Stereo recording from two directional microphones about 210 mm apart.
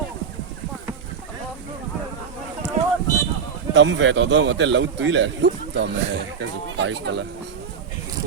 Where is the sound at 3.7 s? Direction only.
60° right (ahead or behind).